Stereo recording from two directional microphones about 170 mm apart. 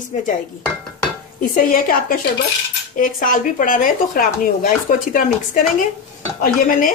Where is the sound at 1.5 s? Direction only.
55° left (ahead or behind).